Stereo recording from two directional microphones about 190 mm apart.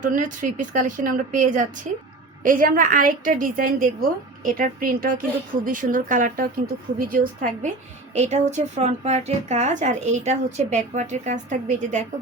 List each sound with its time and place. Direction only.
0.0 s a woman's voice: 45° right (ahead or behind)